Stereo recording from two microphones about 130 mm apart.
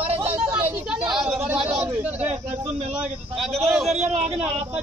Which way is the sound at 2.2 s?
55° right (ahead or behind).